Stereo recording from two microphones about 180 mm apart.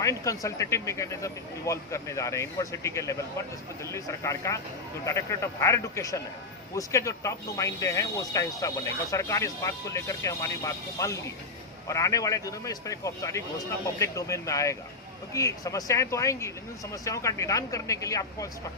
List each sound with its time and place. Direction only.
0.0 s speech: 15° left (ahead or behind)